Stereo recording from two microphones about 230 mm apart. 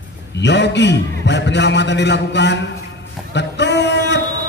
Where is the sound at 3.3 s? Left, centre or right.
Left.